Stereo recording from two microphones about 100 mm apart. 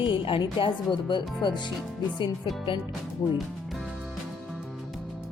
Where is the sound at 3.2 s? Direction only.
35° left (ahead or behind).